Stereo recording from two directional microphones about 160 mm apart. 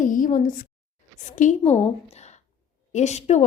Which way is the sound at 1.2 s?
50° left (ahead or behind).